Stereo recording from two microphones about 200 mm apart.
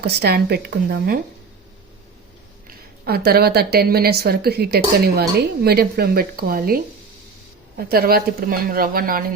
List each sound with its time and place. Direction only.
0.0 s a woman's voice: 55° right (ahead or behind)
2.6 s a woman's voice: 50° right (ahead or behind)